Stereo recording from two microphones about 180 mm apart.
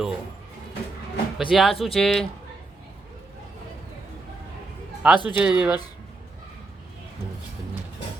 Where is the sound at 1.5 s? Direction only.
Centre (ahead or behind).